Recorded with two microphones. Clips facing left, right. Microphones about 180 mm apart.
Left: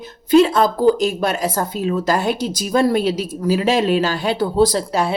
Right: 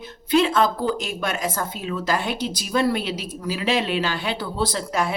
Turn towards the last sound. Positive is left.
turn(degrees=35)  # may be behind; listen again after turning